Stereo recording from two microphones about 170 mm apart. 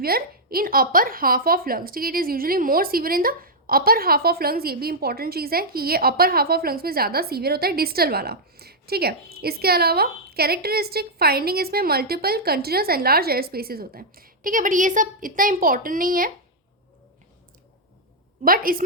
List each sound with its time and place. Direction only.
0.0 s a woman's voice: 60° right (ahead or behind)
18.4 s a woman's voice: 60° right (ahead or behind)